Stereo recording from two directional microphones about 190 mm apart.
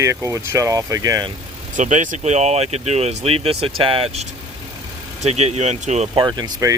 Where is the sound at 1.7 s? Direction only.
40° right (ahead or behind).